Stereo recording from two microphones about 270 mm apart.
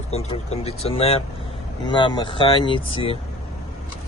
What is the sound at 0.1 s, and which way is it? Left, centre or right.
Speech, left.